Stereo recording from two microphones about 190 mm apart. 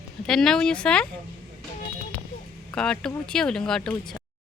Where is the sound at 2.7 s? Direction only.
5° left (ahead or behind).